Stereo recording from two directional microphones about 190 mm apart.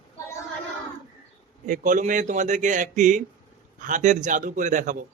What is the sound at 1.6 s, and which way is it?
A man's voice, 40° right (ahead or behind).